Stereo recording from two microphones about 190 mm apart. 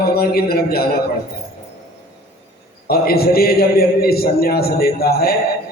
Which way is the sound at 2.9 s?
55° left (ahead or behind).